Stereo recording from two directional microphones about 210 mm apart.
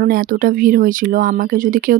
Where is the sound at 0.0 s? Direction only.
45° right (ahead or behind).